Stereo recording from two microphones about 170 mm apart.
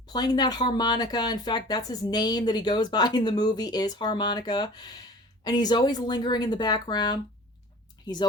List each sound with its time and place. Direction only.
0.1 s speech: 25° left (ahead or behind)